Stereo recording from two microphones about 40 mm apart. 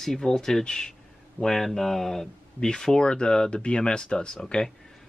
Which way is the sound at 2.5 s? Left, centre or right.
Centre.